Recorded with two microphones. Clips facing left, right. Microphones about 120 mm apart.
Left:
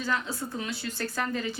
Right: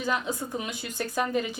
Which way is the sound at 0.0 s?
15° right (ahead or behind).